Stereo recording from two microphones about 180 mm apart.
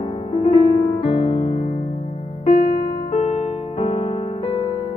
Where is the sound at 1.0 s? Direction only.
30° left (ahead or behind).